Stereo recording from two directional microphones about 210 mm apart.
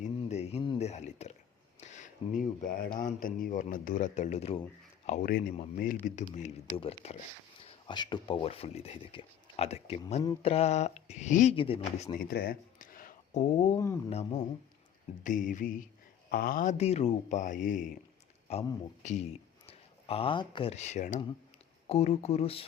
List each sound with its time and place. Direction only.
0.0 s a sound: 30° left (ahead or behind)
1.8 s speech: 35° left (ahead or behind)
12.2 s speech: 45° left (ahead or behind)
13.7 s speech: 15° left (ahead or behind)
14.1 s speech: 30° left (ahead or behind)